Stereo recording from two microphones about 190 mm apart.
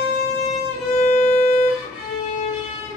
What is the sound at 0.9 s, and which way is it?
Violin, 35° left (ahead or behind).